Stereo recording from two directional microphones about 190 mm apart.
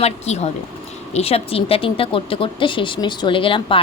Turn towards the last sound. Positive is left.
turn(degrees=25)  # may be behind; listen again after turning